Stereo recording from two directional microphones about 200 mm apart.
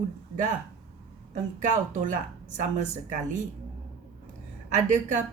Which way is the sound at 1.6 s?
40° right (ahead or behind).